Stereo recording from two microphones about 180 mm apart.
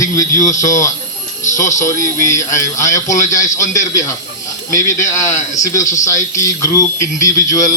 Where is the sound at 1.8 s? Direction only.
15° left (ahead or behind).